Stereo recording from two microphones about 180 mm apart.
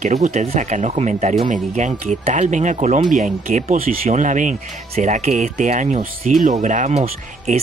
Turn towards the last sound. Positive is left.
turn(degrees=-40)  # may be behind; listen again after turning